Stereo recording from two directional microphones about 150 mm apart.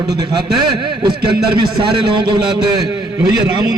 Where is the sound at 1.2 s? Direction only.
90° right.